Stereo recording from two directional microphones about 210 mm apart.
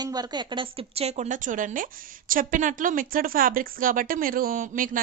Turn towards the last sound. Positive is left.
turn(degrees=-40)  # may be behind; listen again after turning